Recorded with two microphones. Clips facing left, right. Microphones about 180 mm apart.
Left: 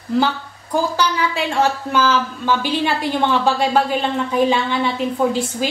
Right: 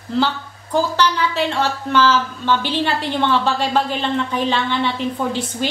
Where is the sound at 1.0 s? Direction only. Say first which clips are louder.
Right 1 dB; 10° left (ahead or behind).